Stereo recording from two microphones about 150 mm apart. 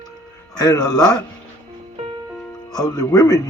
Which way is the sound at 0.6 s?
25° left (ahead or behind).